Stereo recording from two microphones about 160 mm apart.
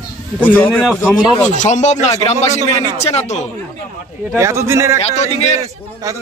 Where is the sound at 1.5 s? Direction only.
50° left (ahead or behind).